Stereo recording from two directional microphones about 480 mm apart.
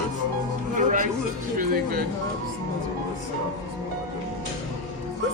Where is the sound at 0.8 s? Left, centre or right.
Centre.